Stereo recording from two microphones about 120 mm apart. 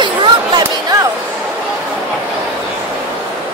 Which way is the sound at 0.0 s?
40° right (ahead or behind).